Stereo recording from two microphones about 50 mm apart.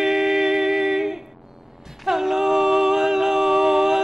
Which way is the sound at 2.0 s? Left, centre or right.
Centre.